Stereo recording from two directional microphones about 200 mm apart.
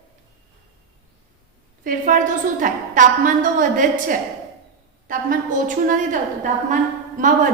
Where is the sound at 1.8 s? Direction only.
40° right (ahead or behind).